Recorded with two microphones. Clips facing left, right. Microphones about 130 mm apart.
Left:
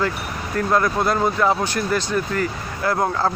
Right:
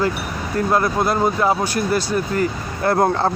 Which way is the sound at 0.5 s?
25° right (ahead or behind).